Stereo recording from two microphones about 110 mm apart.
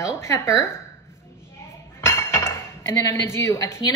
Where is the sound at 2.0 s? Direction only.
25° left (ahead or behind).